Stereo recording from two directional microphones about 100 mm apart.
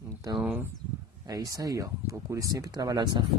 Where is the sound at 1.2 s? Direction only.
40° right (ahead or behind).